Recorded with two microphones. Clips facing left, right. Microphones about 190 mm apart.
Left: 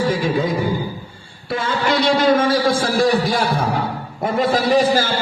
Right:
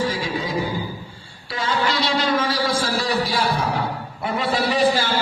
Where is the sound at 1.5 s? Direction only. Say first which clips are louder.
Left 4 dB; 55° left (ahead or behind).